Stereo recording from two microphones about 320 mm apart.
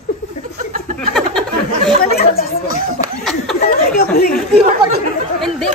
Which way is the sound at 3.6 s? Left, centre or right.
Left.